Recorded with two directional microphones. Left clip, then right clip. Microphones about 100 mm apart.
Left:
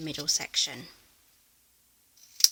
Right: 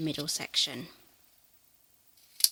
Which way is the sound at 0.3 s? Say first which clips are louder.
Left 4 dB; 20° right (ahead or behind).